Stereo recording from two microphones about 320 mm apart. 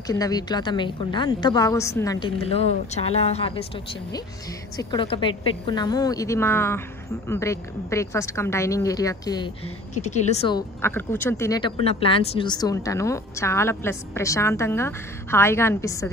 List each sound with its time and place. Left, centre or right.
0.0 s speech: centre
4.7 s speech: centre